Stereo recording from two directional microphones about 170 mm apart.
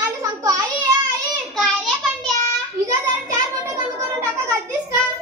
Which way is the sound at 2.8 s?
20° right (ahead or behind).